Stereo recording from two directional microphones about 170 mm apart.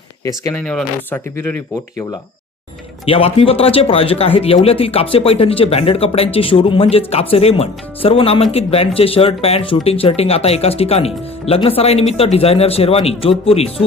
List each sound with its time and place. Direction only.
0.5 s speech: 5° left (ahead or behind)
3.1 s speech: 35° left (ahead or behind)